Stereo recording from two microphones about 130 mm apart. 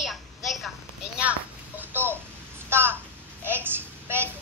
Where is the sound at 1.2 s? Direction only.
10° right (ahead or behind).